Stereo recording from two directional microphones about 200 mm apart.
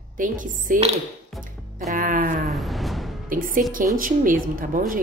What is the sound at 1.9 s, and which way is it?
Speech, 45° right (ahead or behind).